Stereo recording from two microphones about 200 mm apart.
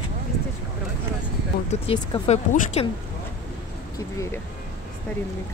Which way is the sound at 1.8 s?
25° left (ahead or behind).